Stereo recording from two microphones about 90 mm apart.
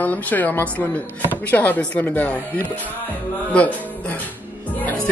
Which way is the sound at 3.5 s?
15° left (ahead or behind).